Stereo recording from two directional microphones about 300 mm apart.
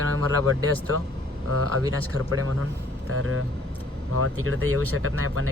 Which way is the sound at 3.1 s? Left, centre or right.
Right.